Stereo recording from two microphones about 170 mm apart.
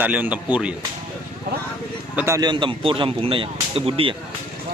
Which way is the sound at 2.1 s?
15° right (ahead or behind).